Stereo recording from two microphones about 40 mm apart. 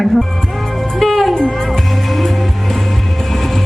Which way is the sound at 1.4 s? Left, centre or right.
Centre.